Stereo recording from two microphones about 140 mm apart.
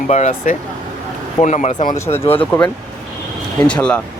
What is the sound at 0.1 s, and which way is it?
Speech, 55° left (ahead or behind).